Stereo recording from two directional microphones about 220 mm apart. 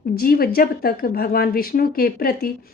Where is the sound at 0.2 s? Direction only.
40° left (ahead or behind).